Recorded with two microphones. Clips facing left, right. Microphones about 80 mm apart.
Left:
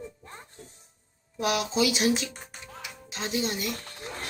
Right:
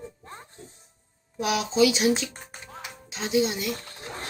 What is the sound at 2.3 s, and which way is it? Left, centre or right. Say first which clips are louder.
Music: right 1 dB; right.